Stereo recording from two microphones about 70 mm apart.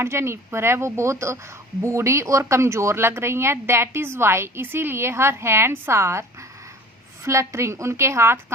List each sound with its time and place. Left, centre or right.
0.0 s speech: right
7.3 s speech: right